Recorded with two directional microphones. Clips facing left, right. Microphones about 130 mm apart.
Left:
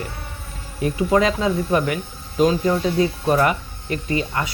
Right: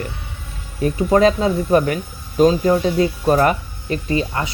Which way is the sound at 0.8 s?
35° right (ahead or behind).